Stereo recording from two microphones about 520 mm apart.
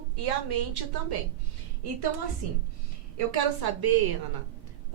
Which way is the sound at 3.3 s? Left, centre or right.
Right.